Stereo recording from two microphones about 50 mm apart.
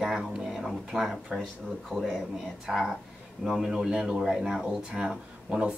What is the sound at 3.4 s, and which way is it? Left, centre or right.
Speech, centre.